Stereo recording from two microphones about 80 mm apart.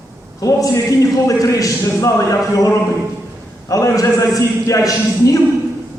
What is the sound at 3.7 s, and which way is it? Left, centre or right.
A man's voice, left.